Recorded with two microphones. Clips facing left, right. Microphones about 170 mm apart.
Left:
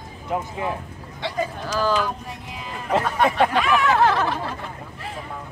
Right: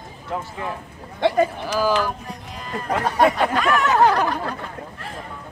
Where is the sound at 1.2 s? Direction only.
55° right (ahead or behind).